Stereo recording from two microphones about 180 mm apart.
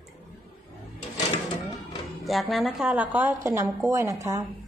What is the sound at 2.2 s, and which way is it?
A woman's voice, centre (ahead or behind).